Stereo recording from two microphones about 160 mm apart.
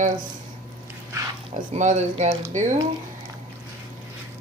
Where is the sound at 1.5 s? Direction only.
50° right (ahead or behind).